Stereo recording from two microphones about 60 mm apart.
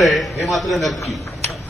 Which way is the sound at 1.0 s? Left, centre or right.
Centre.